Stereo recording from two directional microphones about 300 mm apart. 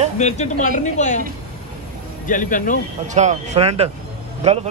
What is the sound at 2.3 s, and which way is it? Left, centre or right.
Speech, left.